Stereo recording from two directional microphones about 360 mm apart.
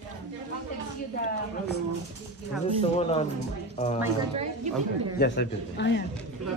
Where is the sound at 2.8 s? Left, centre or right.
Centre.